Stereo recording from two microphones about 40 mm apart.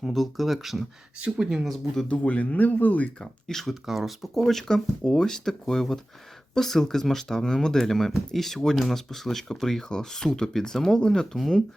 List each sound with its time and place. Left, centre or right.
0.1 s speech: centre
1.2 s speech: right
2.0 s speech: left
3.4 s speech: centre
3.8 s speech: centre
4.7 s speech: centre